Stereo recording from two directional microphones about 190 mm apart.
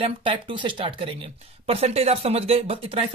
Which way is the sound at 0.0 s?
30° right (ahead or behind).